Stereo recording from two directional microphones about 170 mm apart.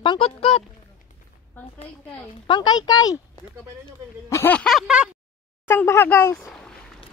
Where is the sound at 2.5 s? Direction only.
25° left (ahead or behind).